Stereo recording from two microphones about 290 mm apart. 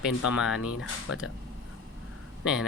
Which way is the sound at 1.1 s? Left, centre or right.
Left.